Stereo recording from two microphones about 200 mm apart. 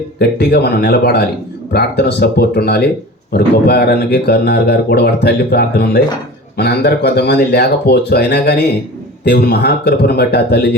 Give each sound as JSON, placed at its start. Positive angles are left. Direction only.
{"t": 0.2, "sound": "speech", "side_deg": 55}